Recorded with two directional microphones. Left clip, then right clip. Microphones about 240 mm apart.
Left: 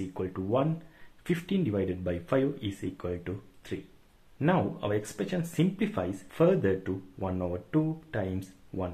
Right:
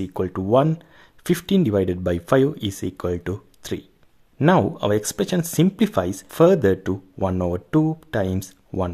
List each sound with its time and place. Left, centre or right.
0.0 s speech: right